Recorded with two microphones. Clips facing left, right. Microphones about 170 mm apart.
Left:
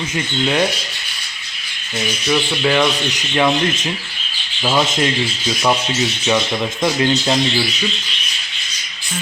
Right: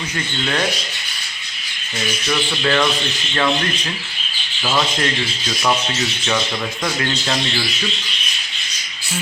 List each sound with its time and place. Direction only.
2.2 s speech: 10° left (ahead or behind)
4.6 s speech: 15° left (ahead or behind)
6.8 s speech: 20° left (ahead or behind)